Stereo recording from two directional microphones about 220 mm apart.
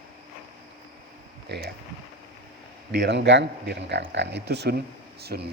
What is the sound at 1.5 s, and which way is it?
Speech, 50° right (ahead or behind).